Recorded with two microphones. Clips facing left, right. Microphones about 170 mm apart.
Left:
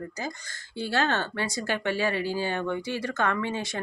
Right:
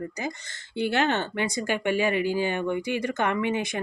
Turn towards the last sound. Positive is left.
turn(degrees=-20)  # may be behind; listen again after turning